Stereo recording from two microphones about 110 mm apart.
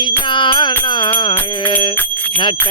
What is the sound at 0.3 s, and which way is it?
Music, 45° left (ahead or behind).